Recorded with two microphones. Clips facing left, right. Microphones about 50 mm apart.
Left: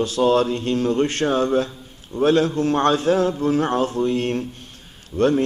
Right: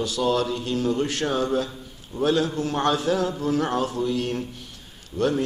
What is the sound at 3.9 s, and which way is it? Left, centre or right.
Speech, left.